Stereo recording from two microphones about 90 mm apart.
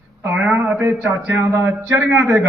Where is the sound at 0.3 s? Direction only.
20° right (ahead or behind).